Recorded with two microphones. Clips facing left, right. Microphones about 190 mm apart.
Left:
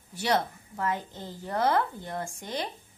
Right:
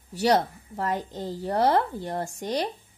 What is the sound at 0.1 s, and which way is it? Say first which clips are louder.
A woman's voice: right 5 dB; 35° right (ahead or behind).